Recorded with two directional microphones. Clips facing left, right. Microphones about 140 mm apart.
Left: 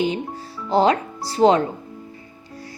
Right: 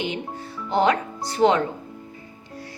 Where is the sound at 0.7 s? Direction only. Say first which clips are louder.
Left 3 dB; 35° left (ahead or behind).